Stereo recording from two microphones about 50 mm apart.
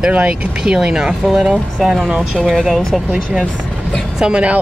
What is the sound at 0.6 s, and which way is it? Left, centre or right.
Speech, centre.